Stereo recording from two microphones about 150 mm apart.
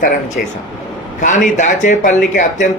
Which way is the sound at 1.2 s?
60° left (ahead or behind).